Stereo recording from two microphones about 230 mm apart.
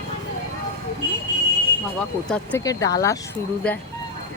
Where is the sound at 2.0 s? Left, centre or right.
Centre.